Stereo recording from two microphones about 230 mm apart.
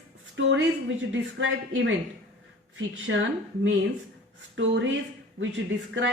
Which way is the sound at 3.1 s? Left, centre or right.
Right.